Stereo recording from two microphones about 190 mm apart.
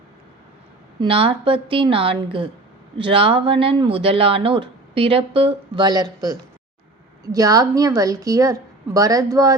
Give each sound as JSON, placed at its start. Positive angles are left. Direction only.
{"t": 0.9, "sound": "speech", "side_deg": -30}
{"t": 7.3, "sound": "a woman's voice", "side_deg": -20}